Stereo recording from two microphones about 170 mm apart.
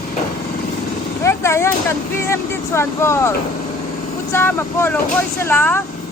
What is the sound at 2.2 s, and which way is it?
Speech, 15° left (ahead or behind).